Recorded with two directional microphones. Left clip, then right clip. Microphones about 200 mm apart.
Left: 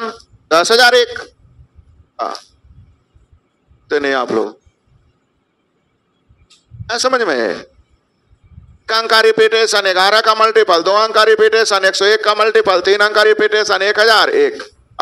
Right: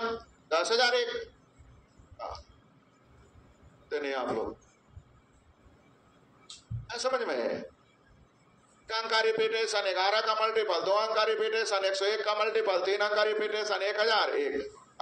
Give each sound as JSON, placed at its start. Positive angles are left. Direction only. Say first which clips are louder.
{"t": 0.5, "sound": "speech", "louder": "left 17 dB", "side_deg": 55}
{"t": 2.1, "sound": "a sound", "louder": "left 19 dB", "side_deg": 55}
{"t": 3.9, "sound": "speech", "louder": "left 17 dB", "side_deg": 55}
{"t": 6.9, "sound": "speech", "louder": "left 16 dB", "side_deg": 55}
{"t": 8.8, "sound": "speech", "louder": "left 17 dB", "side_deg": 55}